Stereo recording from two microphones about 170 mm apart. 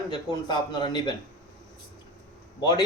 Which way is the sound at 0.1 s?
25° left (ahead or behind).